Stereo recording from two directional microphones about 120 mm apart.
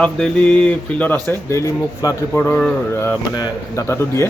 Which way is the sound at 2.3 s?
20° left (ahead or behind).